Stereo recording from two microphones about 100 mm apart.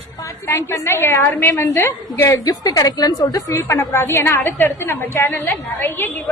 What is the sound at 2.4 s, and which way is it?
A woman's voice, 40° left (ahead or behind).